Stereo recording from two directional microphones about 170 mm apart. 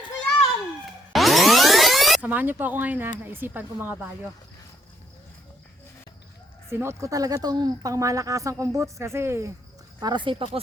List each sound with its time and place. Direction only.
1.1 s music: centre (ahead or behind)
2.3 s speech: 10° right (ahead or behind)
6.7 s speech: 15° right (ahead or behind)
10.0 s speech: 25° right (ahead or behind)